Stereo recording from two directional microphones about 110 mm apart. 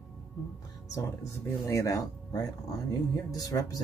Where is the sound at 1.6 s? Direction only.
30° left (ahead or behind).